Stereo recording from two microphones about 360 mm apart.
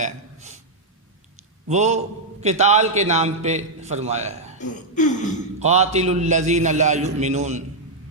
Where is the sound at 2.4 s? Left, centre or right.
Centre.